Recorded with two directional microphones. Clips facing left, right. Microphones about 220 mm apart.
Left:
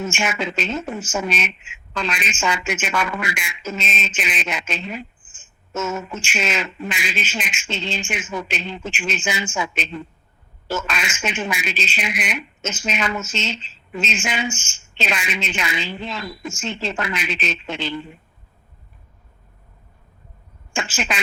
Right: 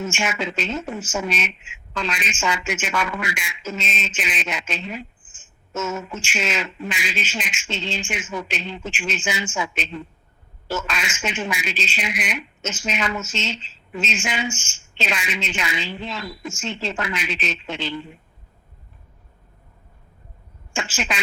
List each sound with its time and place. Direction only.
0.0 s a woman's voice: 55° left (ahead or behind)
20.7 s speech: 55° left (ahead or behind)